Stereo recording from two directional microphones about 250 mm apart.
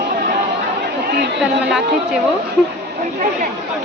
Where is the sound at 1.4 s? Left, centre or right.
Centre.